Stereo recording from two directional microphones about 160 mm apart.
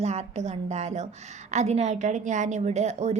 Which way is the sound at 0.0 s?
45° right (ahead or behind).